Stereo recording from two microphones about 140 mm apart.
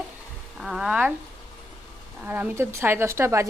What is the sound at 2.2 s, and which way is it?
Speech, 15° right (ahead or behind).